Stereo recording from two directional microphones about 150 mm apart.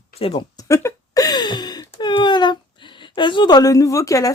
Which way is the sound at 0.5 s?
20° left (ahead or behind).